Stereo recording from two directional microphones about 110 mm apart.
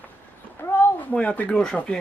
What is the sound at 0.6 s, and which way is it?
A man's voice, 20° left (ahead or behind).